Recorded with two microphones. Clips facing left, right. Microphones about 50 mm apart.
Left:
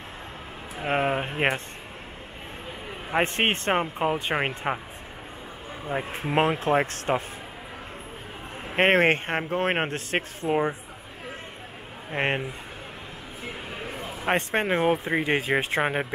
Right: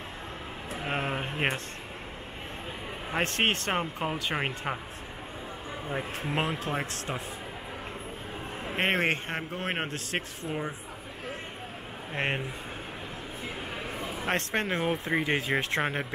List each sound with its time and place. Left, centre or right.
0.7 s speech: centre
3.1 s speech: left
5.9 s speech: centre; by 7.2 s left
8.7 s speech: left
12.1 s speech: centre
14.0 s speech: centre